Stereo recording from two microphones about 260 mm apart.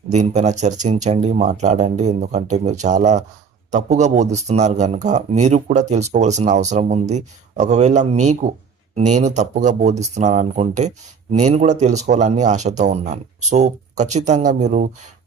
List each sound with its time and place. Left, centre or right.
0.1 s speech: right